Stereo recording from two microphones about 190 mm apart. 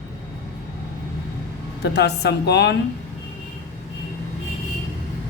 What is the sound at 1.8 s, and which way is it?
Speech, 60° left (ahead or behind).